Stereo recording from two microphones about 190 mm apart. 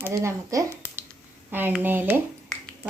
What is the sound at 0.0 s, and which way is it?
Speech, 15° right (ahead or behind).